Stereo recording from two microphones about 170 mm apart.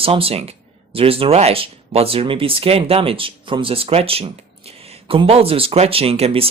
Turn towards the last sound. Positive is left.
turn(degrees=-35)  # may be behind; listen again after turning